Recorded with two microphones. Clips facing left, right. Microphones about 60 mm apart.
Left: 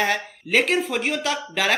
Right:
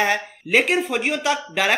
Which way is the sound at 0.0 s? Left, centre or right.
Centre.